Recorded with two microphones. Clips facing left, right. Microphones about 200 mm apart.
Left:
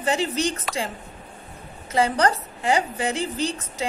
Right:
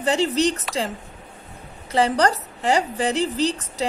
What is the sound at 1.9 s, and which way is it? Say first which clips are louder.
A woman's voice: right 2 dB; 35° right (ahead or behind).